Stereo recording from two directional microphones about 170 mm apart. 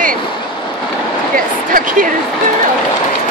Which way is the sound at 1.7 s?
55° right (ahead or behind).